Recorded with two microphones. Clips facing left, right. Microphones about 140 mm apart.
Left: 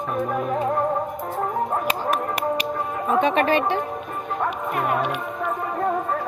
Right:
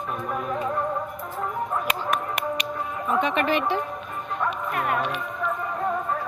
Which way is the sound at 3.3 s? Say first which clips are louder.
Left 3 dB; 55° left (ahead or behind).